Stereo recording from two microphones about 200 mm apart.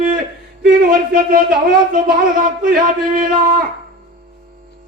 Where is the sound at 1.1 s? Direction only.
45° right (ahead or behind).